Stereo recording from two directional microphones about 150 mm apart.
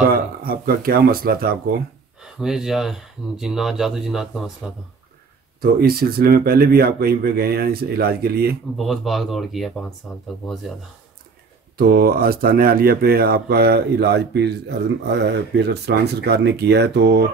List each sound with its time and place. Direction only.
0.1 s speech: 90° right
2.2 s speech: 5° right (ahead or behind)
5.6 s speech: 90° right
8.7 s speech: centre (ahead or behind)
11.8 s speech: 90° right